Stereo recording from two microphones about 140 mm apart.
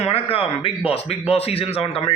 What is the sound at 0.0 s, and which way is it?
A man's voice, 45° left (ahead or behind).